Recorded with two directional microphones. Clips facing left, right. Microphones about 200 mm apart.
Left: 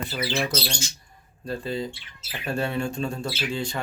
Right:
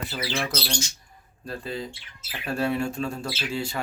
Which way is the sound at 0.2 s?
5° right (ahead or behind).